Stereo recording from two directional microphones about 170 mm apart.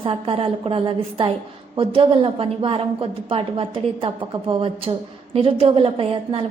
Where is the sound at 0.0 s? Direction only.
30° right (ahead or behind).